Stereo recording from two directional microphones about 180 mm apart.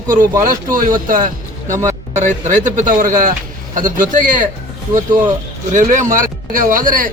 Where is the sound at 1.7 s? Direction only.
15° right (ahead or behind).